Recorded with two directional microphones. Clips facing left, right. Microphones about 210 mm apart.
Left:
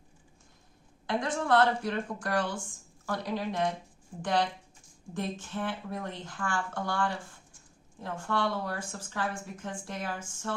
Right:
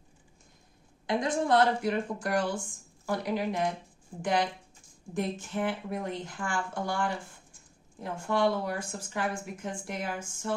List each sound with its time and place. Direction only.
1.0 s speech: 15° right (ahead or behind)